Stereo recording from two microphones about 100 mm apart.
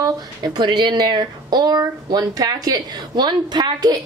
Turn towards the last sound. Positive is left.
turn(degrees=-45)  # may be behind; listen again after turning